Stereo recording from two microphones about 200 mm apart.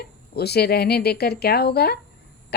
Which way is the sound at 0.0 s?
55° left (ahead or behind).